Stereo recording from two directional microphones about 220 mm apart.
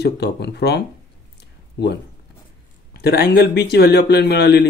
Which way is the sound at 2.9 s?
45° left (ahead or behind).